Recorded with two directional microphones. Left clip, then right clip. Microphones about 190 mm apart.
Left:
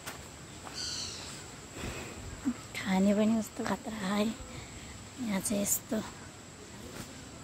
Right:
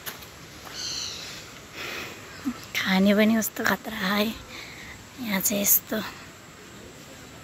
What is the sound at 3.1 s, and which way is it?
Speech, 20° right (ahead or behind).